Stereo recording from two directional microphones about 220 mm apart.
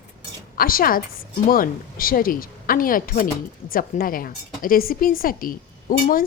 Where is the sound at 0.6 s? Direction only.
40° left (ahead or behind).